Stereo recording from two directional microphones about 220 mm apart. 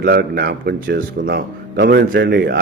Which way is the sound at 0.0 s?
45° right (ahead or behind).